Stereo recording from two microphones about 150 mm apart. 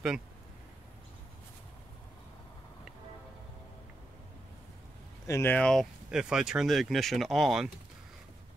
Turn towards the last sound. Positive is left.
turn(degrees=0)  # may be behind; listen again after turning